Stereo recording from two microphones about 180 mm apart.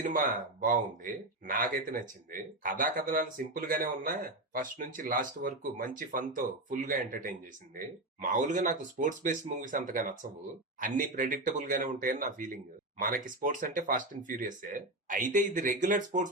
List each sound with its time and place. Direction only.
0.6 s speech: 50° right (ahead or behind)